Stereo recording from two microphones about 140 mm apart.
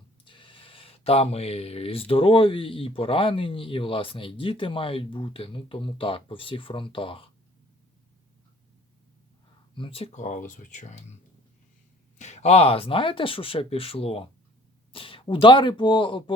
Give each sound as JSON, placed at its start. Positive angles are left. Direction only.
{"t": 0.3, "sound": "speech", "side_deg": 35}
{"t": 9.7, "sound": "speech", "side_deg": 40}
{"t": 12.2, "sound": "speech", "side_deg": 50}